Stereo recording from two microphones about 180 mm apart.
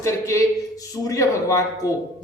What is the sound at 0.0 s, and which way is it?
Speech, 15° left (ahead or behind).